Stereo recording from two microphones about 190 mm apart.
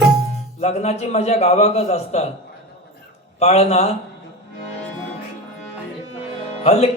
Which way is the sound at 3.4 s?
35° left (ahead or behind).